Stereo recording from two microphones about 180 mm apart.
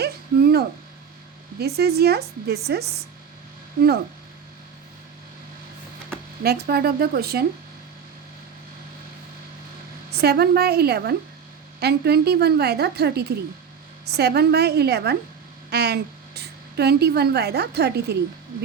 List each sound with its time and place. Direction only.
0.0 s a sound: 60° right (ahead or behind)
1.5 s a woman's voice: 60° right (ahead or behind)
6.4 s a woman's voice: 60° right (ahead or behind)
10.2 s a woman's voice: 60° right (ahead or behind)